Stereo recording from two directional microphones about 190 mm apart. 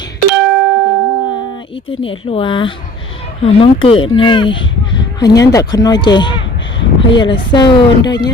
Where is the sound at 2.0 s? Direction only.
30° left (ahead or behind).